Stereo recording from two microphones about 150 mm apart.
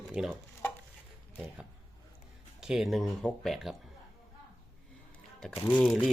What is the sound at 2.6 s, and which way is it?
Speech, 5° right (ahead or behind).